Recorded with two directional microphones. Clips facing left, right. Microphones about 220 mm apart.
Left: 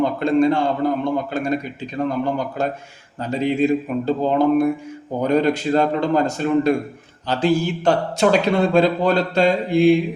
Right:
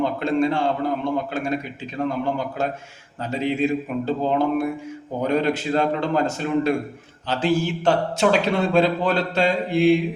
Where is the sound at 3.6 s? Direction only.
5° right (ahead or behind).